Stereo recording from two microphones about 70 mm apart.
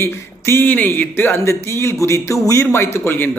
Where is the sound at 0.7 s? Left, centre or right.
Left.